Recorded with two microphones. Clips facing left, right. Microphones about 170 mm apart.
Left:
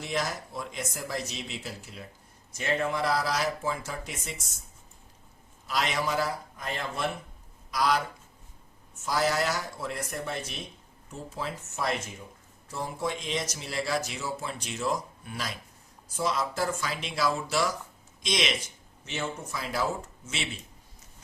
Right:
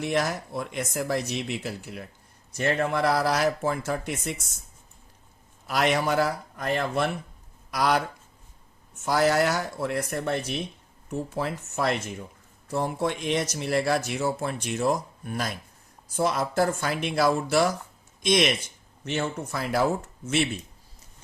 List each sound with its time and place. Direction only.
0.0 s speech: 60° right (ahead or behind)
5.6 s speech: 60° right (ahead or behind)
9.0 s speech: 60° right (ahead or behind)